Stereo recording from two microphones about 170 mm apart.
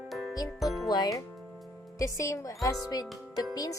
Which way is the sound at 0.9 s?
20° left (ahead or behind).